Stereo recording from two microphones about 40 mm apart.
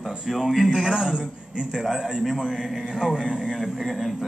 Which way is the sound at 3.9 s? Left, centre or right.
Centre.